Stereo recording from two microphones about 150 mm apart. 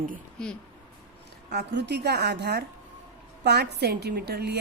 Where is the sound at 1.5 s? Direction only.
90° right.